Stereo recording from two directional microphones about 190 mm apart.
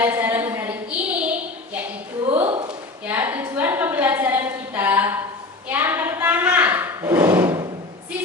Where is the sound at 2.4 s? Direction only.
30° right (ahead or behind).